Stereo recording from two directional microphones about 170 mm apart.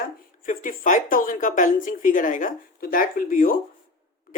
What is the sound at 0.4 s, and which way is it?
Speech, 50° left (ahead or behind).